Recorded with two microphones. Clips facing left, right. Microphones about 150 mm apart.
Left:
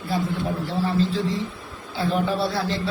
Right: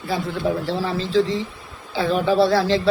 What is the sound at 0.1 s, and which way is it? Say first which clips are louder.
A man's voice: right 3 dB; 90° right.